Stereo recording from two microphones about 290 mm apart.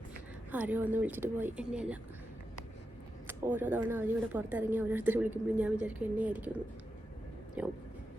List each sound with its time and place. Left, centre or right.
0.5 s speech: centre
3.2 s speech: centre
7.6 s speech: centre